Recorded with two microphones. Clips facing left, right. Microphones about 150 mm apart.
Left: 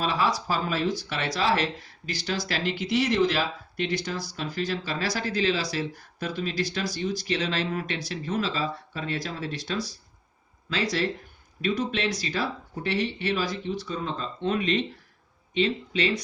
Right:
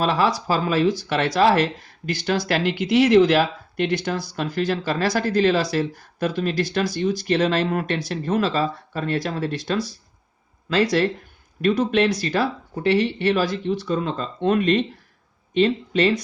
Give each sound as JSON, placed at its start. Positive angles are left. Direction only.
{"t": 0.0, "sound": "speech", "side_deg": -70}